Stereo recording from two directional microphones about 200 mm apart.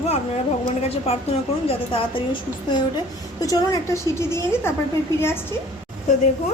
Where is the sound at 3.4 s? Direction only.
15° left (ahead or behind).